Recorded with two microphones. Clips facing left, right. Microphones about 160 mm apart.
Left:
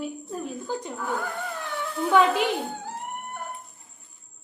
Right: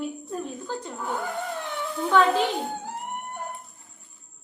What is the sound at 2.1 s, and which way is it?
Speech, 10° left (ahead or behind).